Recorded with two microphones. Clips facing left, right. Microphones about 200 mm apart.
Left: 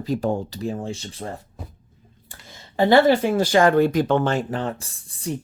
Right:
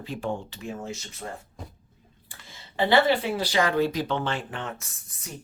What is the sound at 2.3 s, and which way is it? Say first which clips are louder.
Speech: left 4 dB; 45° left (ahead or behind).